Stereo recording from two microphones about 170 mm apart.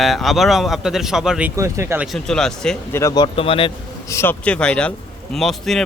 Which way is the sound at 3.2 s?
35° left (ahead or behind).